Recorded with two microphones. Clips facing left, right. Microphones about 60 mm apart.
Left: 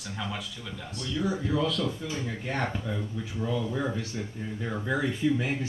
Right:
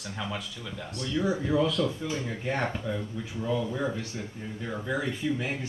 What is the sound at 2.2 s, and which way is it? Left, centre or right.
Speech, centre.